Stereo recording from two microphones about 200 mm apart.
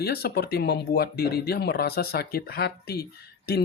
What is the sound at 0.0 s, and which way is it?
Speech, 50° left (ahead or behind).